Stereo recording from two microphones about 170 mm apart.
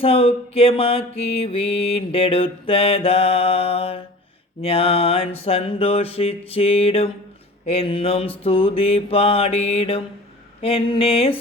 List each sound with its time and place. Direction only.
0.0 s mantra: 35° left (ahead or behind)